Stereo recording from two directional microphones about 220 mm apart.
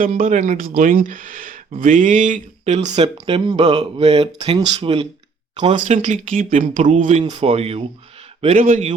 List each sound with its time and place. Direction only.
0.0 s speech: 35° right (ahead or behind)